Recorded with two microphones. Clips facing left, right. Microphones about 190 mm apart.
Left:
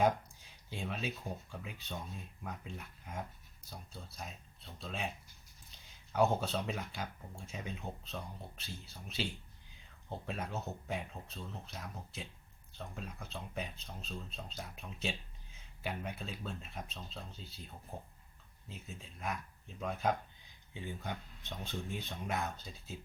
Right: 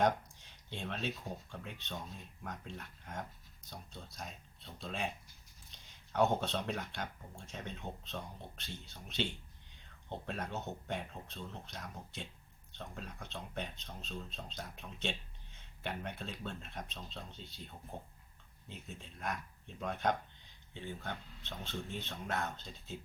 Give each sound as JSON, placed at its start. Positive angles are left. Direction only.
{"t": 0.0, "sound": "speech", "side_deg": 5}